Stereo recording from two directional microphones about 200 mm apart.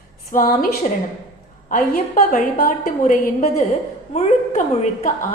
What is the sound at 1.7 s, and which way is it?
A woman's voice, 40° left (ahead or behind).